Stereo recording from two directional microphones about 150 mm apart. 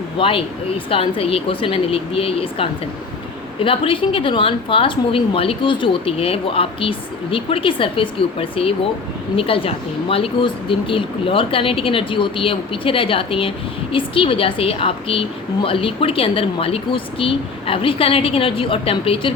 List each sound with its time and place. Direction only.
0.2 s a woman's voice: 35° left (ahead or behind)